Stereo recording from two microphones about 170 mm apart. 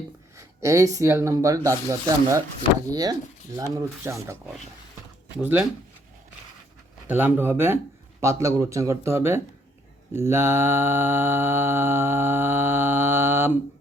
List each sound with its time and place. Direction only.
0.3 s speech: 20° right (ahead or behind)
5.4 s mantra: 10° right (ahead or behind)
7.1 s mantra: 10° right (ahead or behind)